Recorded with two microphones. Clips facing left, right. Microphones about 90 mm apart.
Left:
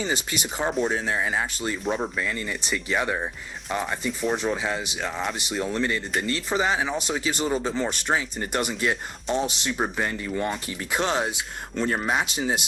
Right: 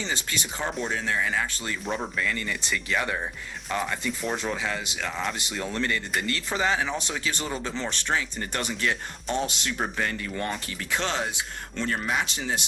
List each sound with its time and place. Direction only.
0.0 s speech: 15° left (ahead or behind)
0.7 s speech: centre (ahead or behind)
0.9 s speech: 20° left (ahead or behind)
1.8 s speech: centre (ahead or behind)
2.1 s speech: 15° left (ahead or behind)
4.2 s speech: 5° left (ahead or behind)
4.5 s speech: 20° left (ahead or behind)
10.9 s speech: 20° left (ahead or behind)
12.2 s speech: 15° left (ahead or behind)